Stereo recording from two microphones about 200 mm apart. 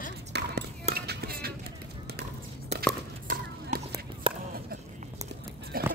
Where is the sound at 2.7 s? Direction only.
30° right (ahead or behind).